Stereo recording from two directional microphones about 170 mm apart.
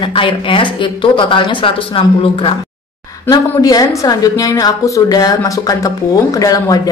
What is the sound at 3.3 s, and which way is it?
A woman's voice, 20° left (ahead or behind).